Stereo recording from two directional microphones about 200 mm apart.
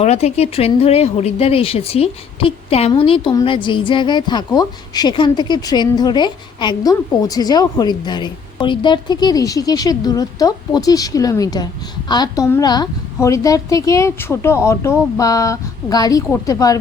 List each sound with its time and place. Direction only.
0.0 s a woman's voice: 30° left (ahead or behind)